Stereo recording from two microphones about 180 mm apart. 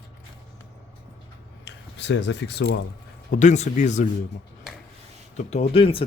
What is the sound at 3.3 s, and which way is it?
Speech, 45° left (ahead or behind).